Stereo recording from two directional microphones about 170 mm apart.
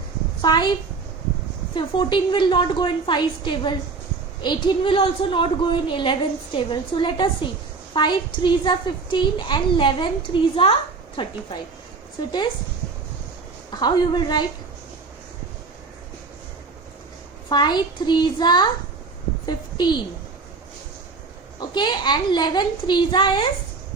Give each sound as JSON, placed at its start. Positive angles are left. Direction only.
{"t": 0.4, "sound": "a woman's voice", "side_deg": 25}
{"t": 1.7, "sound": "a woman's voice", "side_deg": 25}
{"t": 13.7, "sound": "a woman's voice", "side_deg": 25}
{"t": 17.5, "sound": "a woman's voice", "side_deg": 25}
{"t": 21.8, "sound": "a woman's voice", "side_deg": 25}